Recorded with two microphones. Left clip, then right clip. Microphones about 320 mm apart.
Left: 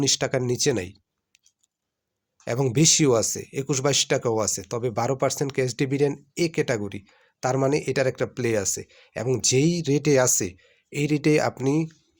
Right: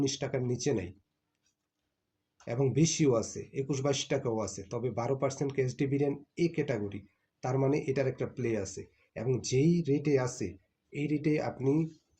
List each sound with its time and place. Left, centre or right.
0.0 s speech: left
2.4 s speech: left
10.9 s speech: left